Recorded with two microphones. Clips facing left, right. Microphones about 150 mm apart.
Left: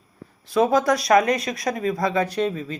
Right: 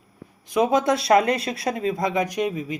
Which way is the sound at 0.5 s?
20° right (ahead or behind).